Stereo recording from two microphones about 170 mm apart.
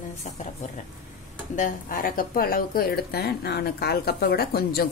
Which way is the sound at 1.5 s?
55° left (ahead or behind).